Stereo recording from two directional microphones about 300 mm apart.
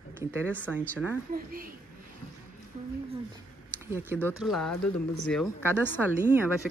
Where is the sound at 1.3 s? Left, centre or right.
Right.